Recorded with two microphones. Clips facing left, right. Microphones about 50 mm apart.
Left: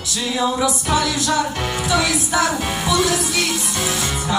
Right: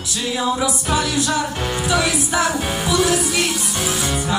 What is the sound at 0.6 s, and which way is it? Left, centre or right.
Music, centre.